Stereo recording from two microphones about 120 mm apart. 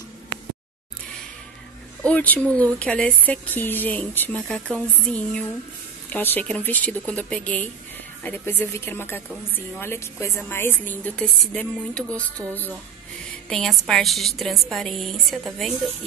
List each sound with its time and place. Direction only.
2.0 s a woman's voice: 10° left (ahead or behind)